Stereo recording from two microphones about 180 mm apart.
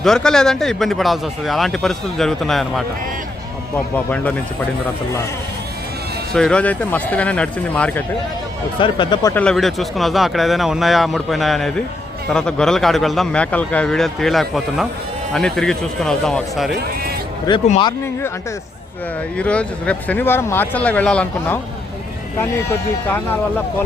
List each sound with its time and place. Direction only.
0.0 s a man's voice: 5° left (ahead or behind)
3.9 s speech: 10° left (ahead or behind)
6.3 s speech: 5° left (ahead or behind)
8.8 s speech: 25° left (ahead or behind)
9.3 s a man's voice: 5° left (ahead or behind)
17.5 s speech: 25° left (ahead or behind)
19.4 s speech: 5° left (ahead or behind)